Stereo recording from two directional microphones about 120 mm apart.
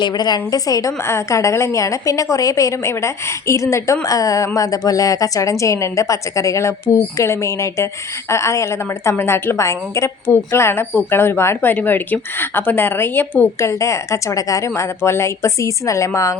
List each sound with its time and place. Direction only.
0.0 s a woman's voice: 35° left (ahead or behind)